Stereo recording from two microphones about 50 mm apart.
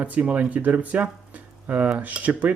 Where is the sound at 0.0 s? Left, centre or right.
Right.